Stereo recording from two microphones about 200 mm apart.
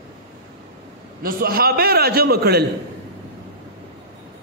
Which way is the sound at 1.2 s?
45° right (ahead or behind).